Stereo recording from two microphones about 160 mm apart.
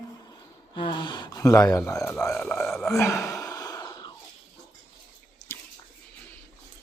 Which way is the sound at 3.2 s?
20° left (ahead or behind).